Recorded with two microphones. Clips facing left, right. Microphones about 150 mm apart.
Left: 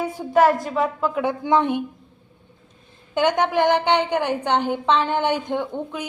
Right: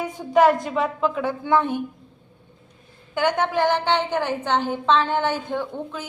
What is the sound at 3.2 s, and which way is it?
A woman's voice, 20° left (ahead or behind).